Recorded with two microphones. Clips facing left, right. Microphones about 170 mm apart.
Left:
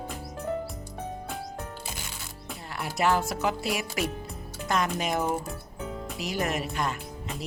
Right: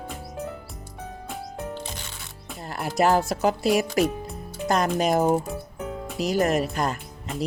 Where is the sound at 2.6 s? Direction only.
40° right (ahead or behind).